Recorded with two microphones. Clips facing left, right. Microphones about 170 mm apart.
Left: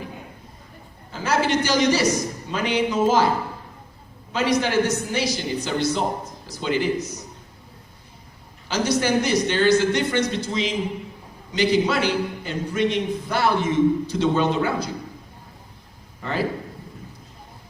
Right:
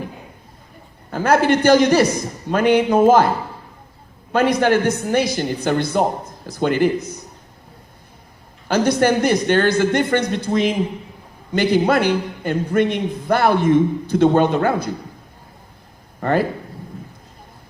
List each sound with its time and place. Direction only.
1.1 s a man's voice: 55° right (ahead or behind)
4.3 s a man's voice: 55° right (ahead or behind)
8.6 s a man's voice: 55° right (ahead or behind)
16.2 s a man's voice: 55° right (ahead or behind)